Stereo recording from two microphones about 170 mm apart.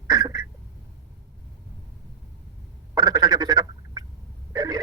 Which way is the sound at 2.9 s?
20° right (ahead or behind).